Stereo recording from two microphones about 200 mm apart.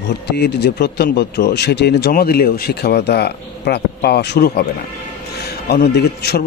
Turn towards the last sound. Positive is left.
turn(degrees=55)  # may be behind; listen again after turning